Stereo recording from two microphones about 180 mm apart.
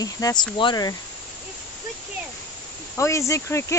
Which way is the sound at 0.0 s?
20° left (ahead or behind).